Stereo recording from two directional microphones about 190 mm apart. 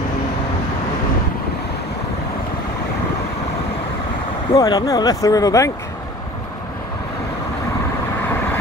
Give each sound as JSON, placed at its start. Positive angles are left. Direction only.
{"t": 4.6, "sound": "speech", "side_deg": 20}